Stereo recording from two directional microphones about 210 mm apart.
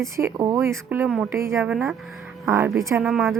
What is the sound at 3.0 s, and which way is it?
Speech, centre (ahead or behind).